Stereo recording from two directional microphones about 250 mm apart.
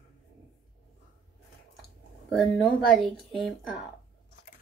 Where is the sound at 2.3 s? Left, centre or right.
Centre.